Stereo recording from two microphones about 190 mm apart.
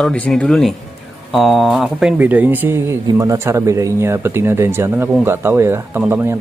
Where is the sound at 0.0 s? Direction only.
5° left (ahead or behind).